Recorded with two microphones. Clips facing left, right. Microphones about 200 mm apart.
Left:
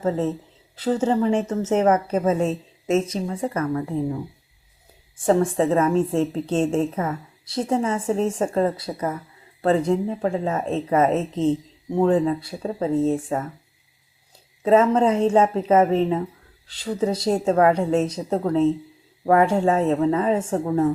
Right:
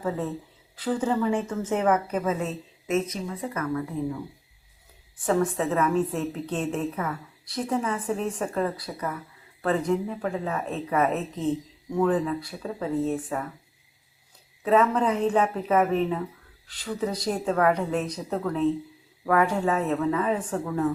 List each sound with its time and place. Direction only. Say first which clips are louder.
0.1 s speech: left 8 dB; 25° left (ahead or behind)
1.5 s speech: left 5 dB; 40° left (ahead or behind)
2.0 s speech: left 6 dB; 30° left (ahead or behind)
5.2 s speech: left 5 dB; 30° left (ahead or behind)
13.2 s speech: left 5 dB; 40° left (ahead or behind)
14.6 s speech: left 5 dB; 30° left (ahead or behind)